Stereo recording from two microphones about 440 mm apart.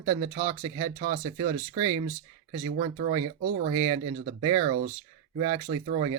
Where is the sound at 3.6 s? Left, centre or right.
Centre.